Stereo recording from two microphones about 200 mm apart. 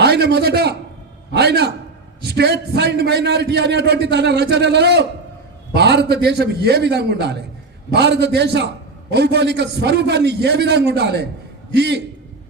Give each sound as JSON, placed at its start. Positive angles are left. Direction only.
{"t": 0.0, "sound": "a man's voice", "side_deg": -55}